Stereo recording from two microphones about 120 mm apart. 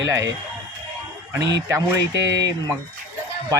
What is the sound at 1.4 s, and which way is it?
Speech, 25° right (ahead or behind).